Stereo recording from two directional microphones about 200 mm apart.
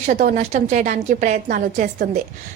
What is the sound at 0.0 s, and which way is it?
A woman's voice, 40° right (ahead or behind).